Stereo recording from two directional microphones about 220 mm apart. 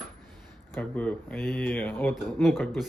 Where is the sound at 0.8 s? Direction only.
5° left (ahead or behind).